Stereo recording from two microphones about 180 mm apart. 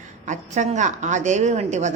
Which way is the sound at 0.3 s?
40° right (ahead or behind).